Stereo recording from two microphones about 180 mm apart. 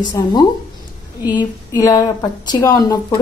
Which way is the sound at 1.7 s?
20° left (ahead or behind).